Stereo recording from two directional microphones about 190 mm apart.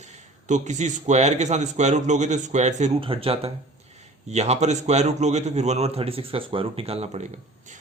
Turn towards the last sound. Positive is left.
turn(degrees=-30)  # may be behind; listen again after turning